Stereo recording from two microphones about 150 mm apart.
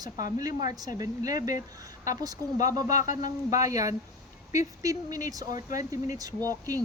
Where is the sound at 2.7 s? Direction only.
25° right (ahead or behind).